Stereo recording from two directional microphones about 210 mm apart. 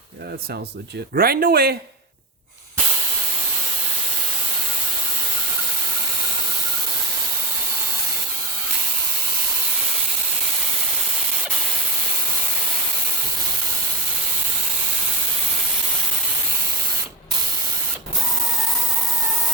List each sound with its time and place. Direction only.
1.1 s speech: 45° right (ahead or behind)